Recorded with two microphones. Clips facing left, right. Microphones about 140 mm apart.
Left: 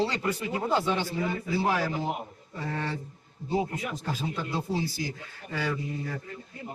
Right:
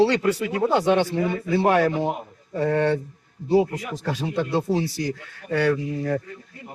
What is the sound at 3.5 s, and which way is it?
Speech, 90° right.